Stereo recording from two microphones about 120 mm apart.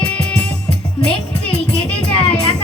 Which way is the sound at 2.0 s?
50° left (ahead or behind).